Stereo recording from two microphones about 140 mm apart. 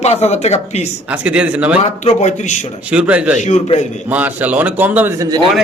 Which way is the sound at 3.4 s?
55° left (ahead or behind).